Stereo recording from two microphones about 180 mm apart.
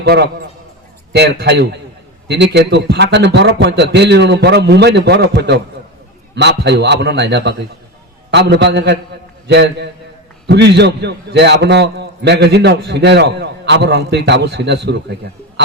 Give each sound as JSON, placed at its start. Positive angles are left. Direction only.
{"t": 0.0, "sound": "a man's voice", "side_deg": -65}